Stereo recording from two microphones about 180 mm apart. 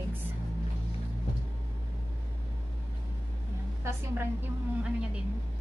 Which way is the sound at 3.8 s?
15° right (ahead or behind).